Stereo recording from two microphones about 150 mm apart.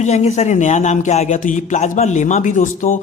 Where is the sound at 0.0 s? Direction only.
45° left (ahead or behind).